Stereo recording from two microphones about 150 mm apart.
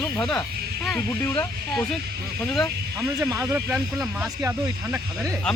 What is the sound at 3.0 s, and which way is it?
Speech, 20° right (ahead or behind).